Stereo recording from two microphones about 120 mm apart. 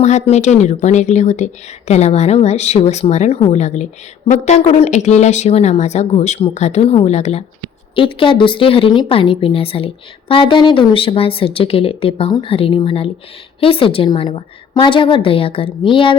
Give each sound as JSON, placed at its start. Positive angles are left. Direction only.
{"t": 0.0, "sound": "a woman's voice", "side_deg": 70}
{"t": 1.9, "sound": "a woman's voice", "side_deg": 65}
{"t": 7.9, "sound": "a woman's voice", "side_deg": 45}